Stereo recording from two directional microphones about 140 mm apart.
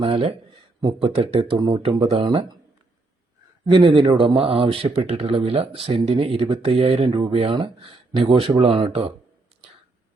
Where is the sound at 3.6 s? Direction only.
35° right (ahead or behind).